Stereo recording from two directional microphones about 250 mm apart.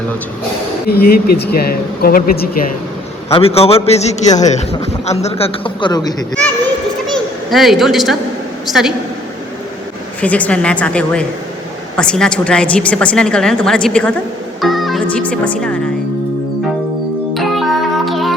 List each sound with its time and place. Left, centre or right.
0.9 s speech: left
3.2 s a man's voice: left
7.1 s a sound: centre
8.6 s a woman's voice: centre
10.2 s a woman's voice: centre
17.3 s music: centre